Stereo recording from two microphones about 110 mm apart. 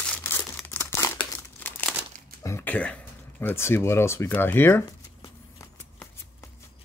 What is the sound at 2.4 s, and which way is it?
Speech, 20° left (ahead or behind).